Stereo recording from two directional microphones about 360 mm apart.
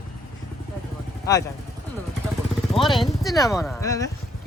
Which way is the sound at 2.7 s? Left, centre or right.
Centre.